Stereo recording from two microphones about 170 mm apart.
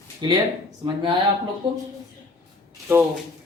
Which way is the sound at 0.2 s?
25° right (ahead or behind).